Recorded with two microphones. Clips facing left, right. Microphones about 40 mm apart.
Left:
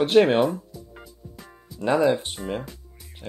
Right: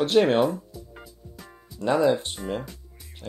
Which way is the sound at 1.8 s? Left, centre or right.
Left.